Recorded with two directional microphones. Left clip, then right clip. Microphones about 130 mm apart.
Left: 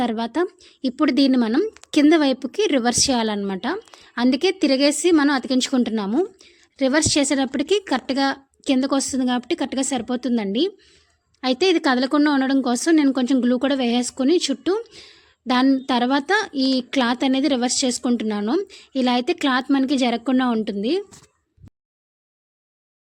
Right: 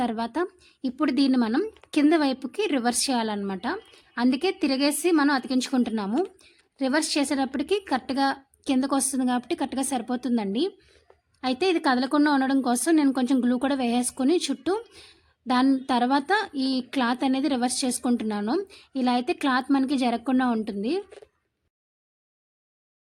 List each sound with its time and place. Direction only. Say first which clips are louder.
0.0 s a woman's voice: left 5 dB; 20° left (ahead or behind)
15.0 s a sound: left 4 dB; 15° left (ahead or behind)
15.9 s a woman's voice: left 3 dB; 15° left (ahead or behind)